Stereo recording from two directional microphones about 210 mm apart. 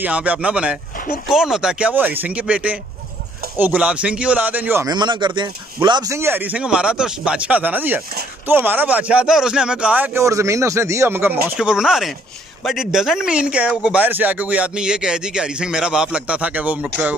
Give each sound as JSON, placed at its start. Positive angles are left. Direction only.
{"t": 0.0, "sound": "speech", "side_deg": -5}